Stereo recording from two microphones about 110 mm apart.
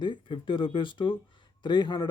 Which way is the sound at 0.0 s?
50° left (ahead or behind).